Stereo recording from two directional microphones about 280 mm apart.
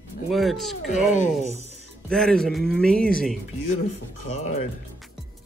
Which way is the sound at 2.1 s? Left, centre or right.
Centre.